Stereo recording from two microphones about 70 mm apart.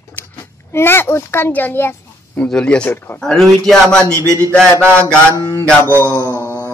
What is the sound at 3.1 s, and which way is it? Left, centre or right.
Speech, centre.